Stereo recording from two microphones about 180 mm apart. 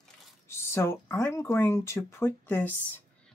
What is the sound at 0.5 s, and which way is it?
Speech, 15° left (ahead or behind).